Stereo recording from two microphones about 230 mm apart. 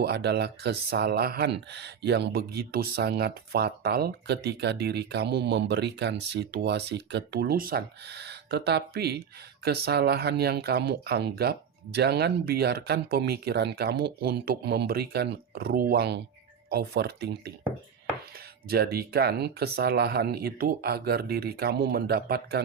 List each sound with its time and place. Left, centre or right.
0.0 s speech: right
18.7 s speech: right